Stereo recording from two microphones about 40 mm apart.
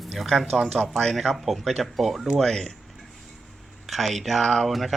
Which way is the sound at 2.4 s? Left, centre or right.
Centre.